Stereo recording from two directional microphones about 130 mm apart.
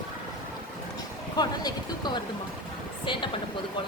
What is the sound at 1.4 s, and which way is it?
Speech, 35° left (ahead or behind).